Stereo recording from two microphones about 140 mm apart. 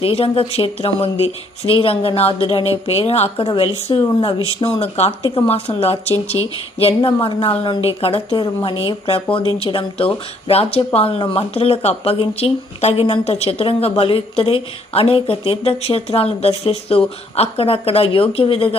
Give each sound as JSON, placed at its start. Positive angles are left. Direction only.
{"t": 0.0, "sound": "speech", "side_deg": 45}
{"t": 6.3, "sound": "a woman's voice", "side_deg": 35}